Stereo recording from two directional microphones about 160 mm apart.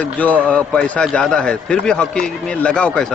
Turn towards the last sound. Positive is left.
turn(degrees=5)  # may be behind; listen again after turning